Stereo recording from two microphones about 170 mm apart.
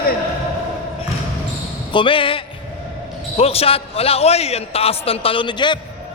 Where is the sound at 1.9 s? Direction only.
30° left (ahead or behind).